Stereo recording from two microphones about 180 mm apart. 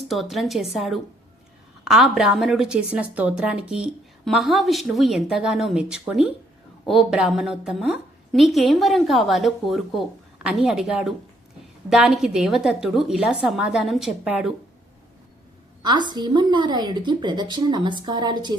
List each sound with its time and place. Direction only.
0.1 s a woman's voice: centre (ahead or behind)
15.8 s a woman's voice: 25° right (ahead or behind)